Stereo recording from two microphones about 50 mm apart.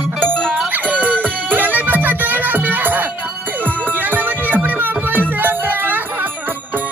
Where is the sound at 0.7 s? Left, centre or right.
Right.